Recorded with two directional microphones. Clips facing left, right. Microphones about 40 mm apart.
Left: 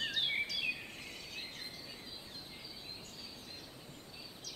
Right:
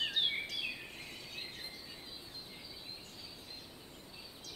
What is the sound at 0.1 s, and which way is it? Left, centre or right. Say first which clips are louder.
Bird vocalization: even; right.